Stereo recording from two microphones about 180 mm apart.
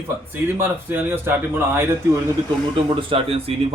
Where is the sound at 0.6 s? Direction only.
10° right (ahead or behind).